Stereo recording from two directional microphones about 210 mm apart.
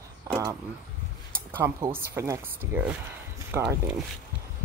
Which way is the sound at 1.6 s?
20° right (ahead or behind).